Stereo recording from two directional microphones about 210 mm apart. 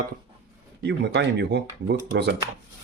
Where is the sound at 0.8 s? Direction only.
55° right (ahead or behind).